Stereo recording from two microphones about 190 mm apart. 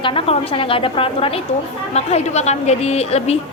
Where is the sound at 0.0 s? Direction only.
30° left (ahead or behind).